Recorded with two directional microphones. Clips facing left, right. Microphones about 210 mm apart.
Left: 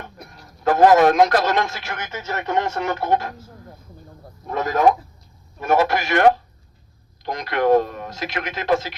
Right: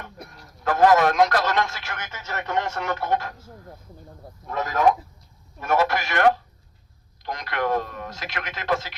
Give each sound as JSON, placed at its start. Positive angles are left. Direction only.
{"t": 0.6, "sound": "a man's voice", "side_deg": 25}
{"t": 5.5, "sound": "a man's voice", "side_deg": 25}